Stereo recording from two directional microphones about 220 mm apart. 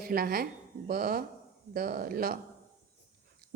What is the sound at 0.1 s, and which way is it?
A woman's voice, 40° right (ahead or behind).